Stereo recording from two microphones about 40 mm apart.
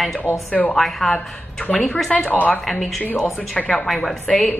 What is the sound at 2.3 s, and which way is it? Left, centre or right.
Speech, left.